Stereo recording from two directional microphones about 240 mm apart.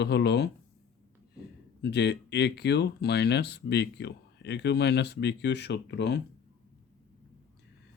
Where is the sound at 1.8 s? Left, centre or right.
Left.